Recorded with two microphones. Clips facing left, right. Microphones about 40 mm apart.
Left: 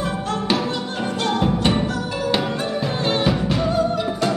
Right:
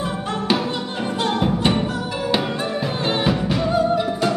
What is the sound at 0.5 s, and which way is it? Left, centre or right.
Music, centre.